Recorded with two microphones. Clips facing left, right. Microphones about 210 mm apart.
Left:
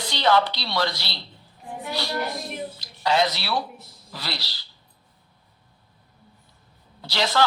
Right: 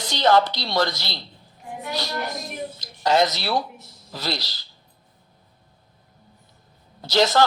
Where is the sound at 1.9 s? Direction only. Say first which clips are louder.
Left 1 dB; 45° right (ahead or behind).